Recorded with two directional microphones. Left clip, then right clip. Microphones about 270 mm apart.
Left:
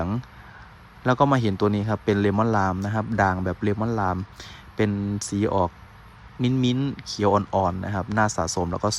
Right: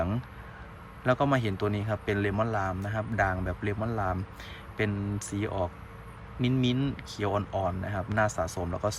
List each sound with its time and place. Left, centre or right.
1.0 s speech: centre